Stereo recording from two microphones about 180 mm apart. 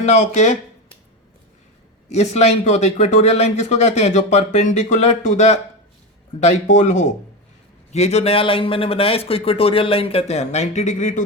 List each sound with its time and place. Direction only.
0.0 s speech: 40° left (ahead or behind)
2.0 s speech: 35° left (ahead or behind)